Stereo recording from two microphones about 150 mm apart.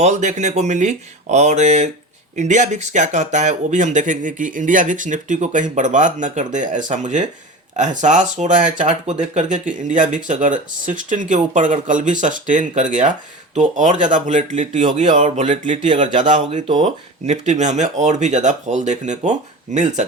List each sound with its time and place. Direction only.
0.0 s speech: 50° right (ahead or behind)